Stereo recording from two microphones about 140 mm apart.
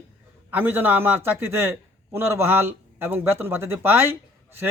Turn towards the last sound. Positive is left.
turn(degrees=-15)  # may be behind; listen again after turning